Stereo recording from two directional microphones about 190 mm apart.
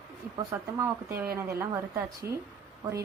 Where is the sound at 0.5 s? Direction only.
10° right (ahead or behind).